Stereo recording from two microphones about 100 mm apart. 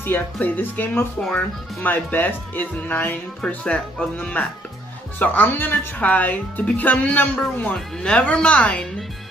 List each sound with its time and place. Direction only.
0.0 s speech: 20° left (ahead or behind)